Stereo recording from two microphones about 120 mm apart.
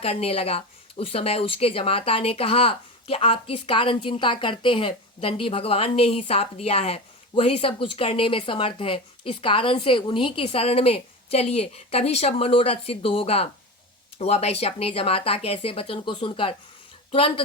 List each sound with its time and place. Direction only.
0.0 s speech: 55° left (ahead or behind)